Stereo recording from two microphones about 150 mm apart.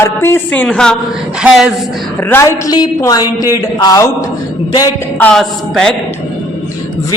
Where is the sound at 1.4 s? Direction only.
5° right (ahead or behind).